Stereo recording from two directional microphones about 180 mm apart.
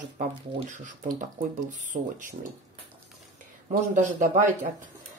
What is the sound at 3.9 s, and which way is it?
Speech, 45° right (ahead or behind).